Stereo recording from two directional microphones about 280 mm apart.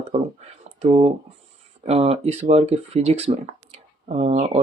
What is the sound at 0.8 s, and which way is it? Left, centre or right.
Speech, right.